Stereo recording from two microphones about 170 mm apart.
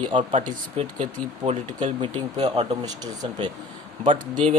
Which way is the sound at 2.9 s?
25° right (ahead or behind).